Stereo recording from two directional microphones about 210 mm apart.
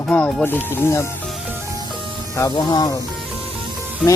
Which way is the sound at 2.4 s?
15° left (ahead or behind).